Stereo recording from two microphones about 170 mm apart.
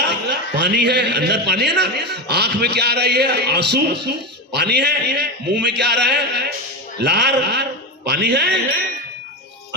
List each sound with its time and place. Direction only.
0.0 s a man's voice: 85° right